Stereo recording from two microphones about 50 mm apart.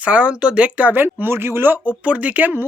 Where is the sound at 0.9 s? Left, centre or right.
Right.